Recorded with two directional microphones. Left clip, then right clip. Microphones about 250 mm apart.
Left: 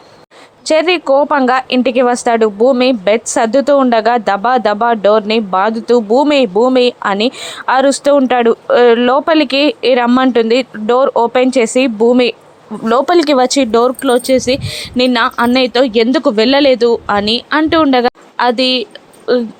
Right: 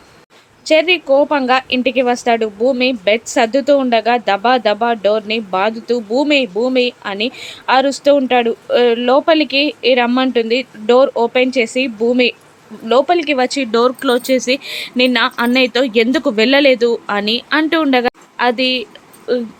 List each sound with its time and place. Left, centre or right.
0.6 s speech: centre
13.7 s speech: centre